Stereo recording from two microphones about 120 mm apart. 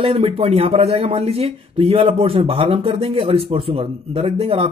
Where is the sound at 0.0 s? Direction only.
55° right (ahead or behind).